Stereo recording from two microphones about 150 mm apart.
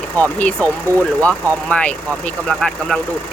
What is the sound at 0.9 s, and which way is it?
Speech, 20° right (ahead or behind).